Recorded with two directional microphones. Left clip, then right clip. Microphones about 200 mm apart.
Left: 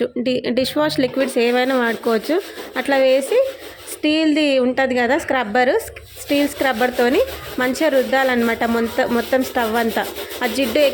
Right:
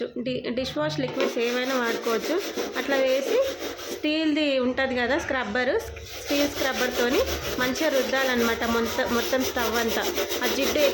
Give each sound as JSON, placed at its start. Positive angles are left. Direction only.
{"t": 0.0, "sound": "speech", "side_deg": 35}